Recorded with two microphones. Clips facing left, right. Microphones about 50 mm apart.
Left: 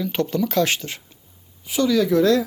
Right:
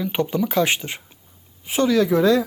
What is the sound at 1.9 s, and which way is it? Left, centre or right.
Speech, centre.